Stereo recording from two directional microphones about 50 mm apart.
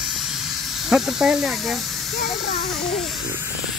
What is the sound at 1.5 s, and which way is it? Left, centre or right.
A child's voice, centre.